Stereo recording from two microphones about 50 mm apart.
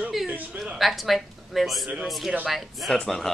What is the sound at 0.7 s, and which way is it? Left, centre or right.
A man's voice, centre.